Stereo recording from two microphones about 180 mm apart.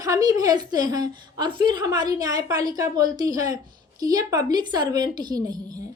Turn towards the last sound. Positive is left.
turn(degrees=-20)  # may be behind; listen again after turning